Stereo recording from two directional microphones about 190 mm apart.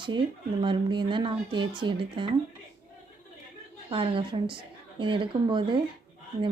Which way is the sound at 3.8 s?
25° right (ahead or behind).